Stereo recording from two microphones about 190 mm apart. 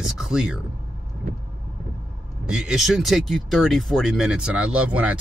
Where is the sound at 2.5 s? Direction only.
5° right (ahead or behind).